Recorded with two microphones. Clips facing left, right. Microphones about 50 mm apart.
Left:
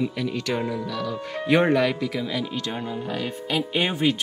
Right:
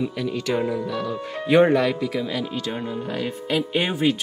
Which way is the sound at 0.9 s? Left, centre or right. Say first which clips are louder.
Right 2 dB; right.